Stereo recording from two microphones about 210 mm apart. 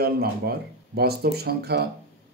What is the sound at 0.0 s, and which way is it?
Speech, 45° right (ahead or behind).